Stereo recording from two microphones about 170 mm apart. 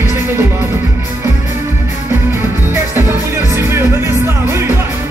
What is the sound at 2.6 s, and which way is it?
Music, 15° right (ahead or behind).